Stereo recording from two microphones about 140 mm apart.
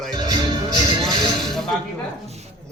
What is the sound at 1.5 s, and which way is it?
Speech, 5° left (ahead or behind).